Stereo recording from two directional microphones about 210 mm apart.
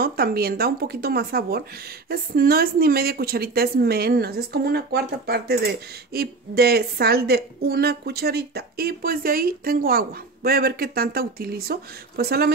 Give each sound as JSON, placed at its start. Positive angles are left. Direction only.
{"t": 0.0, "sound": "speech", "side_deg": -45}